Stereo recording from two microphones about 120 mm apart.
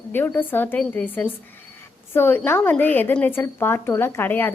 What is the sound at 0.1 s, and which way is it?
Speech, 15° left (ahead or behind).